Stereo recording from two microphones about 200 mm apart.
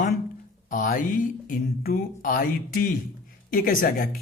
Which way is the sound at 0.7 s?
40° left (ahead or behind).